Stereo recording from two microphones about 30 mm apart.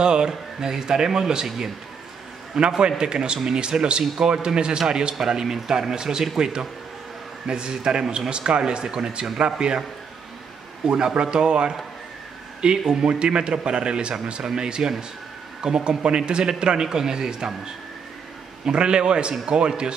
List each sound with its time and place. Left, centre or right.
0.0 s a man's voice: right
10.9 s a man's voice: right
12.7 s a man's voice: centre
13.0 s a man's voice: right
18.7 s a man's voice: right